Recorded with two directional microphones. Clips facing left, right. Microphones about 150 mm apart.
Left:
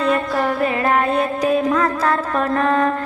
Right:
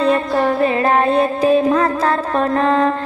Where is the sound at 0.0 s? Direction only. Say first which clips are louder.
Right 3 dB; 30° right (ahead or behind).